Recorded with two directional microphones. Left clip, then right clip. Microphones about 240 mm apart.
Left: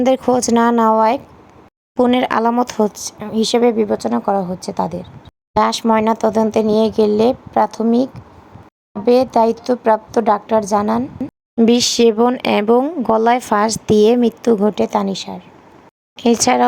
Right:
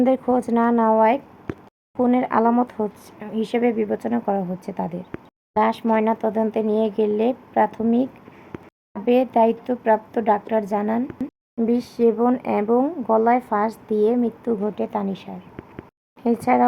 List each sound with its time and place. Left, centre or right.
0.0 s speech: left; by 5.0 s centre
5.5 s speech: left
6.8 s speech: left
7.2 s a woman's voice: centre
9.0 s speech: left
10.5 s a woman's voice: centre
11.7 s speech: left
12.0 s speech: left; by 15.4 s centre
16.2 s speech: left